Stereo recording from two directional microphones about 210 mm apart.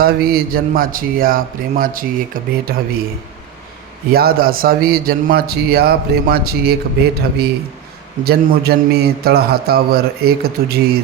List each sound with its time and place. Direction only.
0.0 s a man's voice: 45° right (ahead or behind)
4.1 s a man's voice: 45° right (ahead or behind)